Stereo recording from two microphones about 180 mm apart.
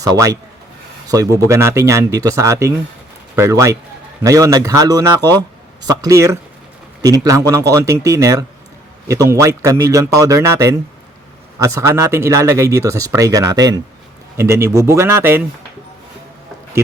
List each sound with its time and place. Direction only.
0.0 s a man's voice: 20° right (ahead or behind)